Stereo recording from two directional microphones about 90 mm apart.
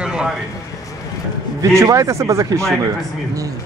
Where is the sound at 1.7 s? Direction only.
35° right (ahead or behind).